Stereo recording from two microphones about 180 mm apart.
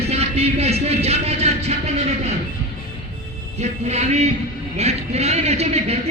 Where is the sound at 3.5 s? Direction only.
40° right (ahead or behind).